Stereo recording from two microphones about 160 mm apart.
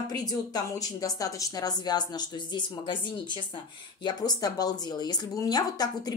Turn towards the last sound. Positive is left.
turn(degrees=25)  # may be behind; listen again after turning